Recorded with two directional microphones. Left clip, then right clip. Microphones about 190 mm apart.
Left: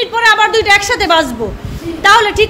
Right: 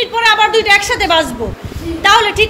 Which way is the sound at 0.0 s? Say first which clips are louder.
Left 1 dB; 30° left (ahead or behind).